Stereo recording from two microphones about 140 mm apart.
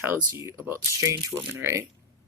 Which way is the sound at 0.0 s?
20° right (ahead or behind).